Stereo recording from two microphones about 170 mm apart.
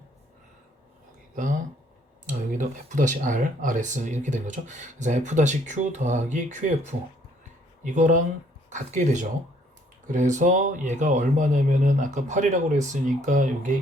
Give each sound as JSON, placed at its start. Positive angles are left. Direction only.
{"t": 2.2, "sound": "speech", "side_deg": -50}